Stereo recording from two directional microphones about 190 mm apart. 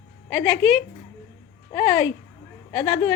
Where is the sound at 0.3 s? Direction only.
10° left (ahead or behind).